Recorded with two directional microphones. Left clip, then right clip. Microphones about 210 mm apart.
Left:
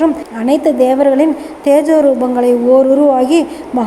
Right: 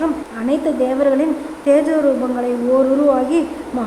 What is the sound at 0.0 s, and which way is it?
A woman's voice, 15° left (ahead or behind).